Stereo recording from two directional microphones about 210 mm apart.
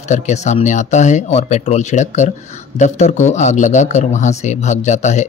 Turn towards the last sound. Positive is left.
turn(degrees=35)  # may be behind; listen again after turning